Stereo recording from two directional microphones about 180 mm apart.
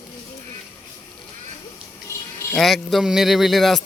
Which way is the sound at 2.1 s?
15° left (ahead or behind).